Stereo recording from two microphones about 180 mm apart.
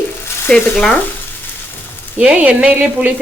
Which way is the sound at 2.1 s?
5° right (ahead or behind).